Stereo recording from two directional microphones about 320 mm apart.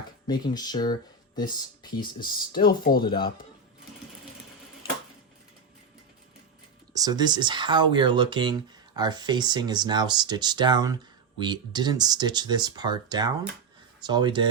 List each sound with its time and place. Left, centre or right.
0.3 s speech: centre
2.6 s speech: left
3.0 s speech: centre
6.9 s speech: centre